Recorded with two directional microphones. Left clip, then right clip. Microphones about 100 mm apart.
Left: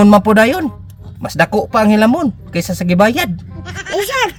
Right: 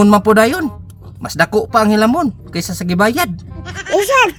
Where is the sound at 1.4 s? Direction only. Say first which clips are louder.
Even; 55° left (ahead or behind).